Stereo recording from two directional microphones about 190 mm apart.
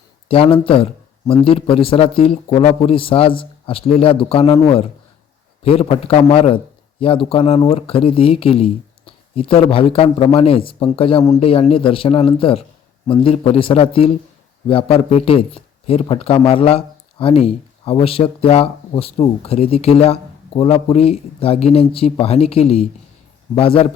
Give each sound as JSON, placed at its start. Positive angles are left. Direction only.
{"t": 0.3, "sound": "speech", "side_deg": 30}
{"t": 5.6, "sound": "speech", "side_deg": 30}